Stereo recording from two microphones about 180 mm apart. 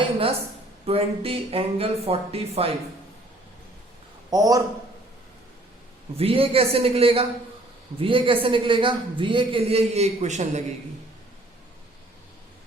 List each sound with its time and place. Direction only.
0.9 s speech: 30° right (ahead or behind)
4.3 s a man's voice: 20° right (ahead or behind)
6.1 s a man's voice: 30° right (ahead or behind)